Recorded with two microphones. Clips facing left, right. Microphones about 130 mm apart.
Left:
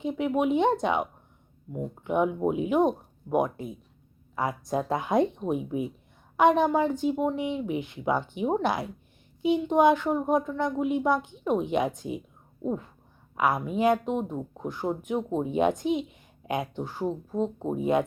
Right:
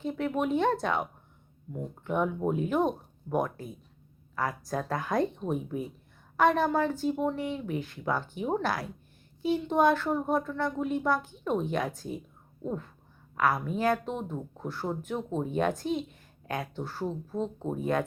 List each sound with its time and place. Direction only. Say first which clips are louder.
0.0 s speech: left 4 dB; 15° left (ahead or behind)
13.3 s speech: left 2 dB; 20° left (ahead or behind)